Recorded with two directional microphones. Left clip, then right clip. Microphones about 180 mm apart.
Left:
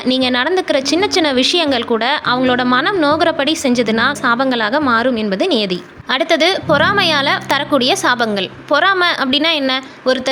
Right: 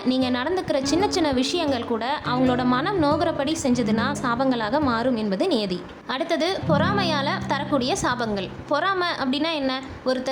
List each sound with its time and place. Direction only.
0.1 s a woman's voice: 15° left (ahead or behind)